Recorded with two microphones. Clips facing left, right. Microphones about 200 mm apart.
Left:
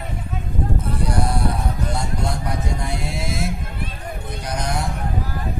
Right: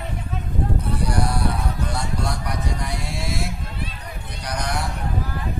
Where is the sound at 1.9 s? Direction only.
25° left (ahead or behind).